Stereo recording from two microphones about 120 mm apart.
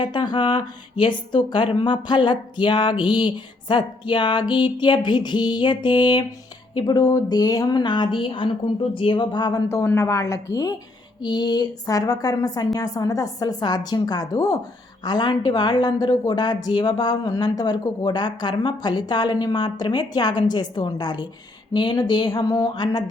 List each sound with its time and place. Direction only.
0.0 s speech: 40° left (ahead or behind)
9.6 s a woman's voice: 20° left (ahead or behind)